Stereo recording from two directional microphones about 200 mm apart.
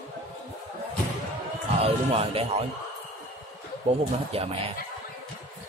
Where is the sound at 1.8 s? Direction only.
30° right (ahead or behind).